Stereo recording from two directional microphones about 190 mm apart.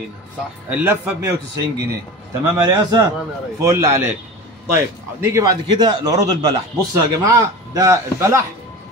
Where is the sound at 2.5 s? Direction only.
20° right (ahead or behind).